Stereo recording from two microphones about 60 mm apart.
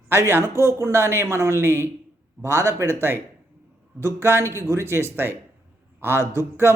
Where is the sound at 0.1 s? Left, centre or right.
Right.